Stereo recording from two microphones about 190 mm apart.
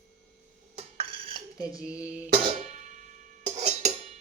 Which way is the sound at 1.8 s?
5° right (ahead or behind).